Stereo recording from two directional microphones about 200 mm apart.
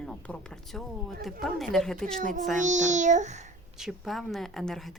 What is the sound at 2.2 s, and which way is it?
A child's voice, 40° right (ahead or behind).